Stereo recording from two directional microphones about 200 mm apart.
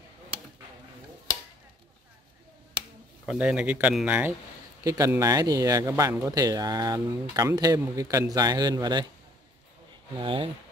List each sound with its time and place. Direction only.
3.3 s speech: 5° right (ahead or behind); by 9.0 s 20° right (ahead or behind)
10.1 s speech: 25° right (ahead or behind)